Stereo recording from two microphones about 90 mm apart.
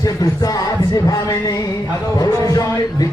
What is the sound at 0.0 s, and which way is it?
A man's voice, 40° left (ahead or behind).